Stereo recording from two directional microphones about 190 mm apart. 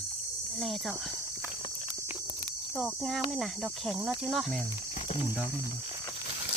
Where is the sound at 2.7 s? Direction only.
Centre (ahead or behind).